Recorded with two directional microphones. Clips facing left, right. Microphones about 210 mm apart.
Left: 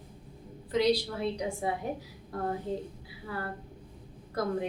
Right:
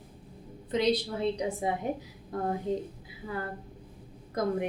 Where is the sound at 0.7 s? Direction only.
20° right (ahead or behind).